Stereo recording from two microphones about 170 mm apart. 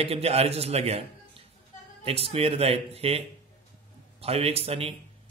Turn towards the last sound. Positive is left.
turn(degrees=-35)  # may be behind; listen again after turning